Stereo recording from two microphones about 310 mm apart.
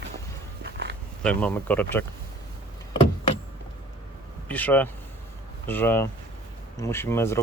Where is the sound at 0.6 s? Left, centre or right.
Right.